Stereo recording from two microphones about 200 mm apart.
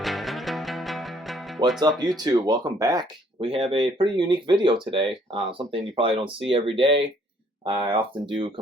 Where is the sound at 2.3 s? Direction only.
20° right (ahead or behind).